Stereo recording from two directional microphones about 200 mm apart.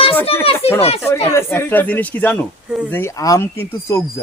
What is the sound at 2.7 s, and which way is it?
Speech, 5° right (ahead or behind).